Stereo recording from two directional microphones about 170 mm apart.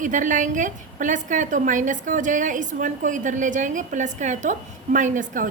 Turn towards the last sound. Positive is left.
turn(degrees=-50)  # may be behind; listen again after turning